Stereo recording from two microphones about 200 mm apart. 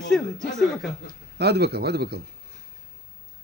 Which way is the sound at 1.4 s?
55° right (ahead or behind).